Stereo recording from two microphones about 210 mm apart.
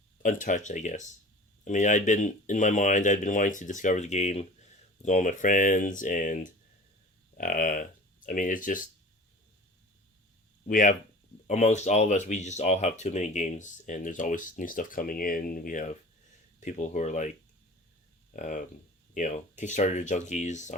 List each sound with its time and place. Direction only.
0.2 s speech: 40° left (ahead or behind)
10.7 s speech: 40° left (ahead or behind)
18.3 s speech: 35° left (ahead or behind)